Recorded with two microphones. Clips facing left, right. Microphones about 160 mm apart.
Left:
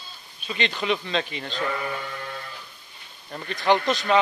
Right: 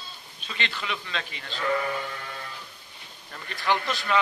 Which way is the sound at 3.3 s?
20° left (ahead or behind).